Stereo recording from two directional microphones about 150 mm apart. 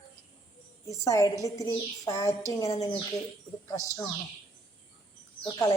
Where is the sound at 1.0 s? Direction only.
20° left (ahead or behind).